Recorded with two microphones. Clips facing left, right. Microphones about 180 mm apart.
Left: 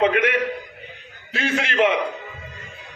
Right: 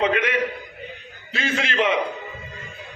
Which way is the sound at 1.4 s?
55° left (ahead or behind).